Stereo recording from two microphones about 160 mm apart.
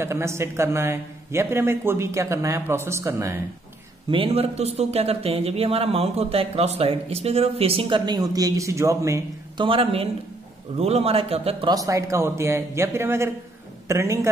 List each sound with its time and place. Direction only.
0.0 s speech: 15° right (ahead or behind)
4.1 s a man's voice: 35° right (ahead or behind); by 9.7 s 20° right (ahead or behind)
9.7 s a man's voice: 35° right (ahead or behind)
11.7 s speech: 20° right (ahead or behind)